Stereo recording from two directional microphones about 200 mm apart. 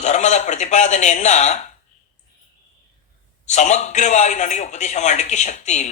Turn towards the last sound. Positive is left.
turn(degrees=35)  # may be behind; listen again after turning